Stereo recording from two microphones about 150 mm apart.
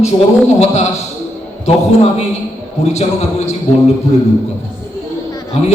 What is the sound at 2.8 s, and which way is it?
Speech, 45° left (ahead or behind).